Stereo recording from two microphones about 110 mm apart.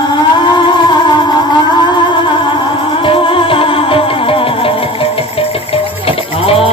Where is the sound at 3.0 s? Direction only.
50° left (ahead or behind).